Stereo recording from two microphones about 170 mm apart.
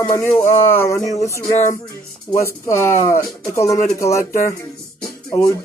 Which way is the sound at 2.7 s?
15° left (ahead or behind).